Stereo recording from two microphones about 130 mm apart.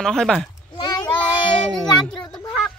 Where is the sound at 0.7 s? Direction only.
35° left (ahead or behind).